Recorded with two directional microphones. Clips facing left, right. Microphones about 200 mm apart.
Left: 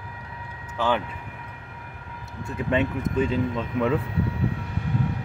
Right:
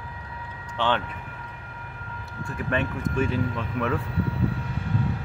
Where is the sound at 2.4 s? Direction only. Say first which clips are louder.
Left 3 dB; 20° left (ahead or behind).